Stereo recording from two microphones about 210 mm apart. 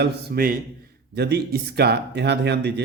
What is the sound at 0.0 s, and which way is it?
Speech, 45° right (ahead or behind).